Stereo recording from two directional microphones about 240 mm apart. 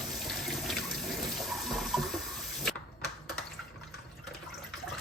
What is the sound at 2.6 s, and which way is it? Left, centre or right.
Typewriter, centre.